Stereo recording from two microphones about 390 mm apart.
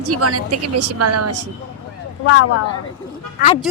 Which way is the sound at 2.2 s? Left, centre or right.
Left.